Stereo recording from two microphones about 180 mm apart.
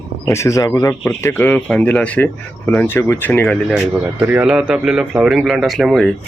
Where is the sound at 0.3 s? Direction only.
15° left (ahead or behind).